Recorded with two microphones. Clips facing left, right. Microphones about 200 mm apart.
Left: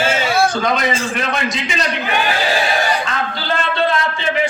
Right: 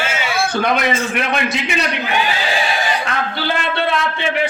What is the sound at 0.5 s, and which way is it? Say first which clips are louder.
A man's voice: right 1 dB; 60° right (ahead or behind).